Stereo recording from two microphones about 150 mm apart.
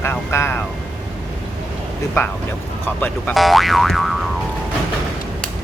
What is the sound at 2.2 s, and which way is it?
Speech, 15° left (ahead or behind).